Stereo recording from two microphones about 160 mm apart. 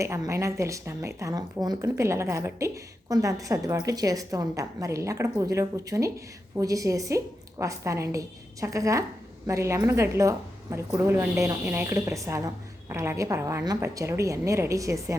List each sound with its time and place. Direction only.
0.0 s speech: 20° right (ahead or behind)